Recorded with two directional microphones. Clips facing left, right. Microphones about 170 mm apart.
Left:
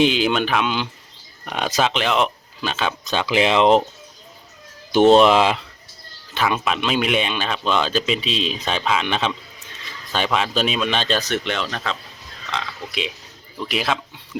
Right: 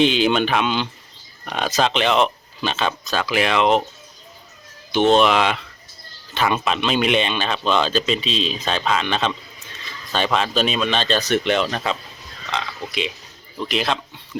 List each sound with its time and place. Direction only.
0.0 s speech: 5° left (ahead or behind)
3.0 s speech: 20° left (ahead or behind)
4.9 s speech: 40° left (ahead or behind)
6.3 s speech: 5° left (ahead or behind)
10.3 s speech: 10° left (ahead or behind)
11.2 s speech: 15° right (ahead or behind)
12.9 s speech: centre (ahead or behind)